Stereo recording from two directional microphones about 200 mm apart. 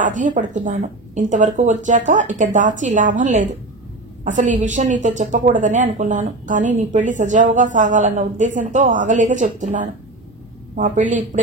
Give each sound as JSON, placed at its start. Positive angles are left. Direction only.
{"t": 0.0, "sound": "a woman's voice", "side_deg": -40}